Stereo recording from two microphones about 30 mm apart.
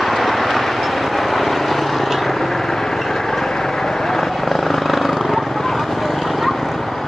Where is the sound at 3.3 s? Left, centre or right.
Centre.